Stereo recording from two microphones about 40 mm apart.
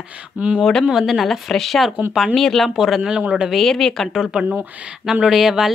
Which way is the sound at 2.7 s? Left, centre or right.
Centre.